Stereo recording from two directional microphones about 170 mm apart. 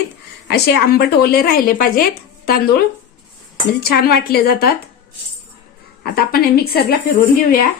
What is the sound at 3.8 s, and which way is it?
Speech, 65° left (ahead or behind).